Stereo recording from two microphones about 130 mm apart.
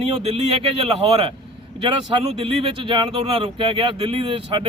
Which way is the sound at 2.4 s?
45° right (ahead or behind).